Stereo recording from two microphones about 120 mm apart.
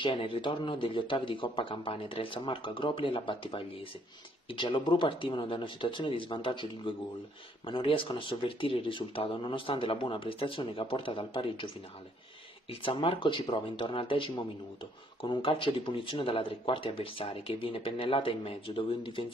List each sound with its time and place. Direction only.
0.0 s speech: 45° left (ahead or behind)
12.8 s speech: 50° left (ahead or behind)